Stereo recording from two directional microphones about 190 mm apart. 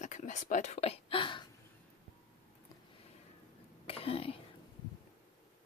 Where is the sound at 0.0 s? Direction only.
40° left (ahead or behind).